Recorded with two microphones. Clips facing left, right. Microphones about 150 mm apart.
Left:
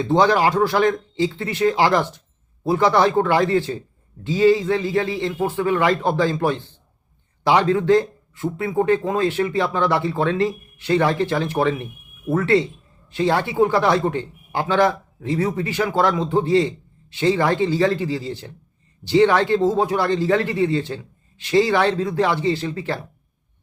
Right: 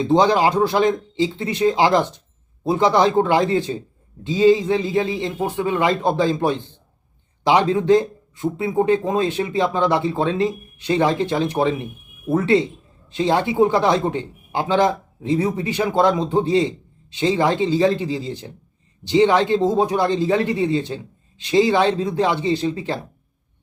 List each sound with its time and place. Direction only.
0.0 s a man's voice: 15° right (ahead or behind)